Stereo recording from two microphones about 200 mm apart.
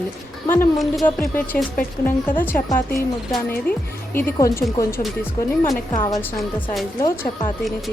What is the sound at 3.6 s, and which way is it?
Speech, 10° left (ahead or behind).